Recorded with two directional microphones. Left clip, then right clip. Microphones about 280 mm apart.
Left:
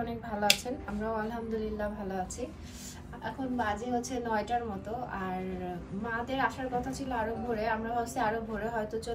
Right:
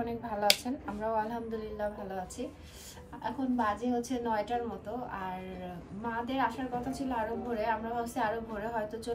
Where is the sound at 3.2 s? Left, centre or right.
Centre.